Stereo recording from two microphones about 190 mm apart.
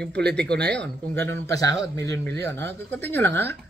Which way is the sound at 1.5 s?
20° left (ahead or behind).